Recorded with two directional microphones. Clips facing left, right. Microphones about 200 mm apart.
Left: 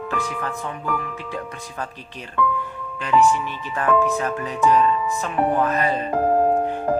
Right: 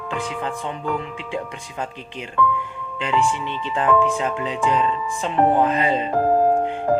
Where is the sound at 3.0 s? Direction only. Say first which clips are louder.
Left 3 dB; 25° right (ahead or behind).